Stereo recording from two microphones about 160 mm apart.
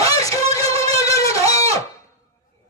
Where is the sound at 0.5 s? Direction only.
20° left (ahead or behind).